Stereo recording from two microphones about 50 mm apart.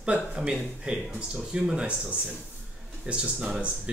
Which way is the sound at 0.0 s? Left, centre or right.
Centre.